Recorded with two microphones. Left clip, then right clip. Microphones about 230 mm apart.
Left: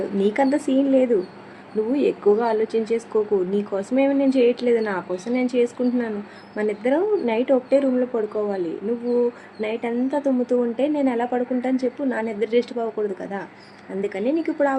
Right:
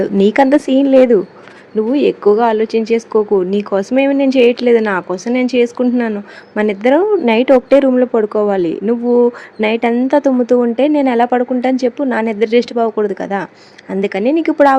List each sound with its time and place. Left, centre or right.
0.2 s speech: right